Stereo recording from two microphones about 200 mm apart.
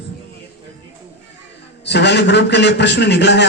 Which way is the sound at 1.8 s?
60° left (ahead or behind).